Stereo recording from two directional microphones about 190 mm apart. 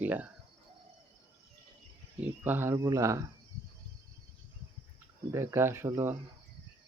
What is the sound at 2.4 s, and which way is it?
Speech, 10° right (ahead or behind).